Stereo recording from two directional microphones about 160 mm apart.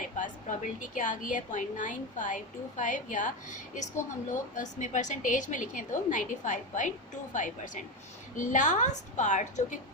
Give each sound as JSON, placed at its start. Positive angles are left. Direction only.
{"t": 0.0, "sound": "a woman's voice", "side_deg": 55}